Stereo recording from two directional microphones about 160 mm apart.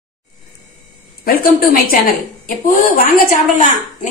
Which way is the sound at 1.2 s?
65° left (ahead or behind).